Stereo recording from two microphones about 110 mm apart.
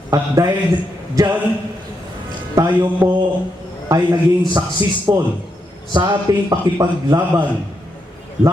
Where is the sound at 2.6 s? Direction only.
25° right (ahead or behind).